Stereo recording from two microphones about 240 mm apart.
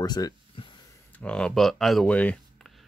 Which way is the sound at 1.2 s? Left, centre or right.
Centre.